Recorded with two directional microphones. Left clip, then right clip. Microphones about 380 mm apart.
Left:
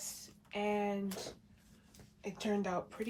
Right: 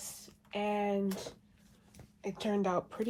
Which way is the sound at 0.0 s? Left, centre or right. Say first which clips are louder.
Left 1 dB; centre.